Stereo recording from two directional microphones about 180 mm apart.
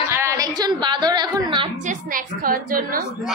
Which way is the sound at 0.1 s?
15° right (ahead or behind).